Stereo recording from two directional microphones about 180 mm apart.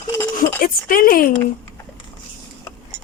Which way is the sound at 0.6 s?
50° left (ahead or behind).